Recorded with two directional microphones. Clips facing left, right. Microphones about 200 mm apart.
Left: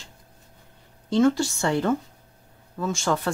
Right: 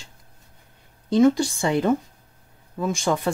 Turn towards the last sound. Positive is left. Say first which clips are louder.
# right 2 dB
turn(degrees=-15)  # may be behind; listen again after turning